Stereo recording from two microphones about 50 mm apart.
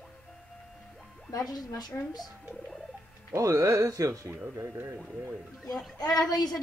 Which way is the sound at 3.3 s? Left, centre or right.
Right.